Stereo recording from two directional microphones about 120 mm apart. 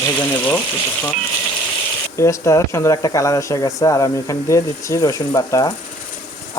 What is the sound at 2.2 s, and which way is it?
Speech, 25° left (ahead or behind).